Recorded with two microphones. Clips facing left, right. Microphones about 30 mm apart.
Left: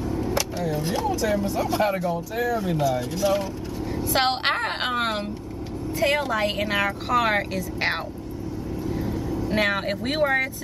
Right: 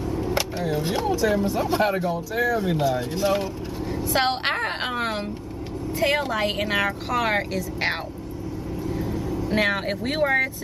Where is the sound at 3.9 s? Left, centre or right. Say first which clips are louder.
Even; centre.